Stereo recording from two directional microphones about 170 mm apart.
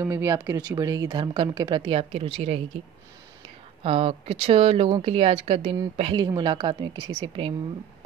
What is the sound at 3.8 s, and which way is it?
Speech, 35° right (ahead or behind).